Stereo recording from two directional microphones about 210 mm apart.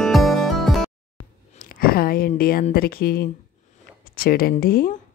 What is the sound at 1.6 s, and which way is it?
Speech, 45° left (ahead or behind).